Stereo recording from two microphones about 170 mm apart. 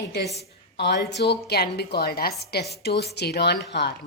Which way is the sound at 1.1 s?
75° left (ahead or behind).